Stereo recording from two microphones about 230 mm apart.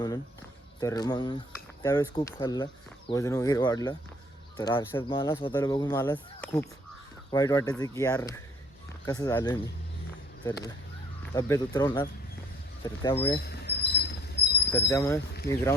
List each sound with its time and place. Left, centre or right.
0.8 s speech: centre
13.4 s cricket: left
14.7 s speech: centre